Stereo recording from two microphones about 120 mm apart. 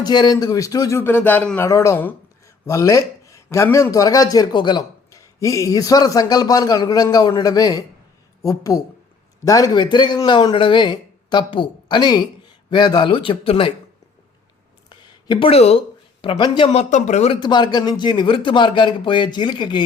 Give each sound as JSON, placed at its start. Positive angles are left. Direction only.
{"t": 0.0, "sound": "speech", "side_deg": 35}
{"t": 0.9, "sound": "speech", "side_deg": 15}
{"t": 5.1, "sound": "speech", "side_deg": 25}
{"t": 14.8, "sound": "a sound", "side_deg": 45}
{"t": 16.2, "sound": "speech", "side_deg": 45}
{"t": 16.7, "sound": "speech", "side_deg": 70}
{"t": 17.4, "sound": "speech", "side_deg": 40}